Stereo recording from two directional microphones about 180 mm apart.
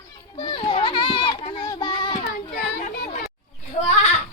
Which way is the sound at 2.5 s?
50° left (ahead or behind).